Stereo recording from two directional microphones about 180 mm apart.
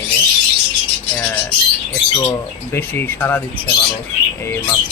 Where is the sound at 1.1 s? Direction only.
10° left (ahead or behind).